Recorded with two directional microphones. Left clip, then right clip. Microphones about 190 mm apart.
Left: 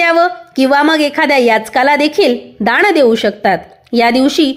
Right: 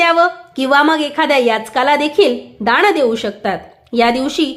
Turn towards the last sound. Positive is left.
turn(degrees=20)  # may be behind; listen again after turning